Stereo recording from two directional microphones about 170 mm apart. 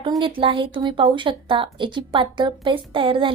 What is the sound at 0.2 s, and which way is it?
A woman's voice, 30° right (ahead or behind).